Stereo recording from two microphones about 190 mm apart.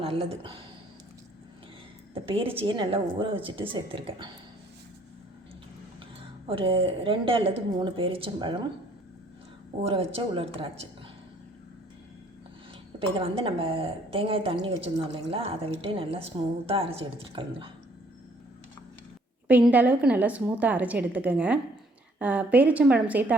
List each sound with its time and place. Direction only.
0.0 s speech: 30° right (ahead or behind)
2.2 s a woman's voice: 30° right (ahead or behind)
6.5 s a woman's voice: 30° right (ahead or behind)
9.8 s speech: 30° right (ahead or behind)
13.0 s a woman's voice: 30° right (ahead or behind)
19.5 s a woman's voice: 10° right (ahead or behind)